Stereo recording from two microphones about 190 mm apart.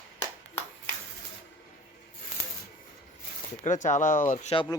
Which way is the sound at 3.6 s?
40° left (ahead or behind).